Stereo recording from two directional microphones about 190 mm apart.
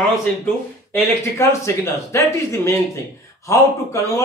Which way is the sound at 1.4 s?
15° left (ahead or behind).